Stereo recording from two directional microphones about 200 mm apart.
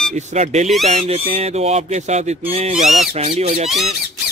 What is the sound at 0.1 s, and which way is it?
Speech, 35° right (ahead or behind).